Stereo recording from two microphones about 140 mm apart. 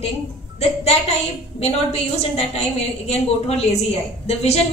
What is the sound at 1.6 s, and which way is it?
A woman's voice, 45° left (ahead or behind).